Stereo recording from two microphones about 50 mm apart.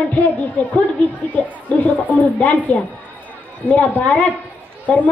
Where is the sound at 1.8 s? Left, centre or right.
Left.